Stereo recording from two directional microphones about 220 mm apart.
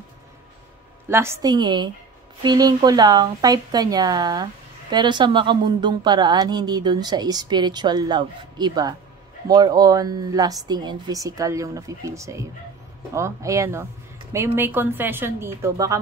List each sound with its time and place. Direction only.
1.0 s a woman's voice: 10° right (ahead or behind)